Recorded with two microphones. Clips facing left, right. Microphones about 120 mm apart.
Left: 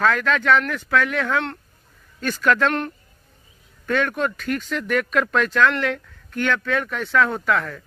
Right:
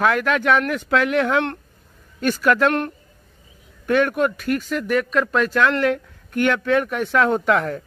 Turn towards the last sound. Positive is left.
turn(degrees=-20)  # may be behind; listen again after turning